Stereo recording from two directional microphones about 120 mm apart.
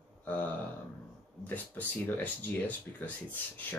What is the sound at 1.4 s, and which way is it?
Speech, 15° left (ahead or behind).